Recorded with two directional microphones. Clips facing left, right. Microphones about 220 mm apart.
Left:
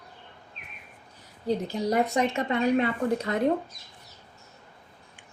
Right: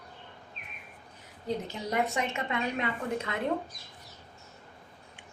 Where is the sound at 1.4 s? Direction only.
35° left (ahead or behind).